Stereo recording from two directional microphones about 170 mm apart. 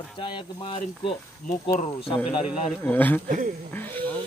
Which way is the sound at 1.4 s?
45° left (ahead or behind).